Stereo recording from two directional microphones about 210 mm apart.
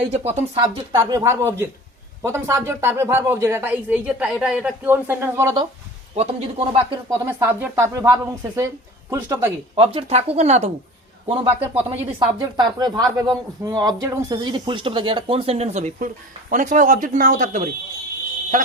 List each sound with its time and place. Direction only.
0.1 s speech: 30° right (ahead or behind)
0.9 s speech: 15° right (ahead or behind)
6.1 s speech: 25° right (ahead or behind)
7.3 s speech: 10° right (ahead or behind)
9.7 s speech: 25° right (ahead or behind)